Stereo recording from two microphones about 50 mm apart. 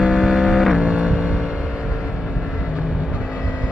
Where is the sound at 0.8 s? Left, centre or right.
Centre.